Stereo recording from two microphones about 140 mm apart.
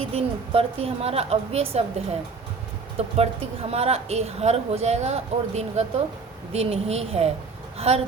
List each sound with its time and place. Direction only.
0.1 s a woman's voice: 45° right (ahead or behind)
3.2 s a woman's voice: 45° right (ahead or behind)